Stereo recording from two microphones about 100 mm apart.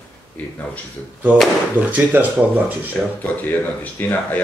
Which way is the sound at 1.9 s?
15° right (ahead or behind).